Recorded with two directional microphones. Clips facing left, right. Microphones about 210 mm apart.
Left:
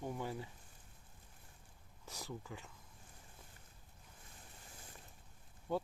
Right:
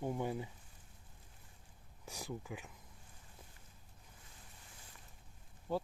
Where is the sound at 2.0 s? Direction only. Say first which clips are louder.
Right 3 dB; 15° right (ahead or behind).